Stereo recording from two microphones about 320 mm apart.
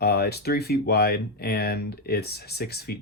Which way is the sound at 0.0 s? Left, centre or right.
Left.